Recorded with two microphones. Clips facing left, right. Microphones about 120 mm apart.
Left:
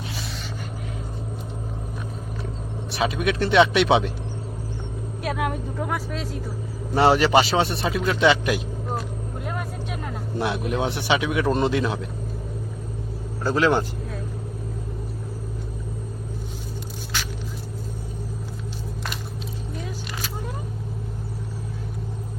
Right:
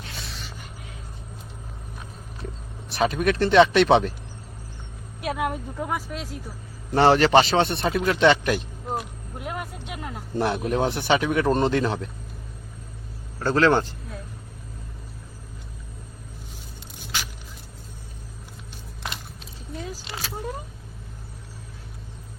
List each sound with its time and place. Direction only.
0.2 s a sound: centre (ahead or behind)
2.9 s a man's voice: centre (ahead or behind)
5.2 s a woman's voice: 5° right (ahead or behind)
9.0 s vehicle: 10° right (ahead or behind)
10.3 s a man's voice: centre (ahead or behind)
13.4 s a man's voice: 5° left (ahead or behind)
19.8 s single-lens reflex camera: 35° right (ahead or behind)